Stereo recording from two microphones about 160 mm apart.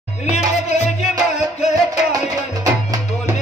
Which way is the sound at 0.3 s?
45° left (ahead or behind).